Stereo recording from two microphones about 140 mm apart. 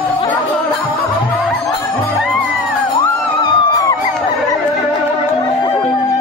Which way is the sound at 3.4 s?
25° left (ahead or behind).